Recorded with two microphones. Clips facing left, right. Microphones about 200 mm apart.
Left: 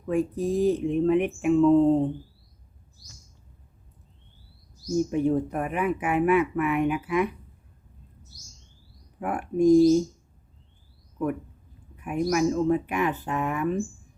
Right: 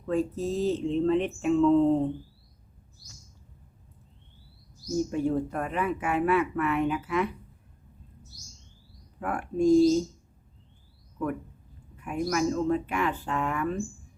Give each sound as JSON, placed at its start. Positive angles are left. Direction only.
{"t": 0.0, "sound": "speech", "side_deg": 15}
{"t": 4.9, "sound": "speech", "side_deg": 20}
{"t": 9.2, "sound": "speech", "side_deg": 20}
{"t": 11.9, "sound": "speech", "side_deg": 15}